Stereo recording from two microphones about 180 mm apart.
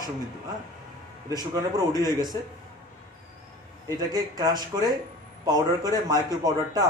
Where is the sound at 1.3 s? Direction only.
20° right (ahead or behind).